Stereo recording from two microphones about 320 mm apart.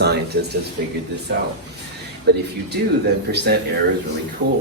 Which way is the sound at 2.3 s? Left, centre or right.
Right.